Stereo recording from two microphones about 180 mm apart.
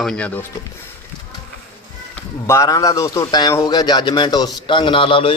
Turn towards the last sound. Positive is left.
turn(degrees=30)  # may be behind; listen again after turning